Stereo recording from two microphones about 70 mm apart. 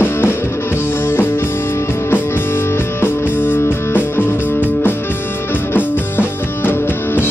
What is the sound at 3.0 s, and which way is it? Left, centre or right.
Music, left.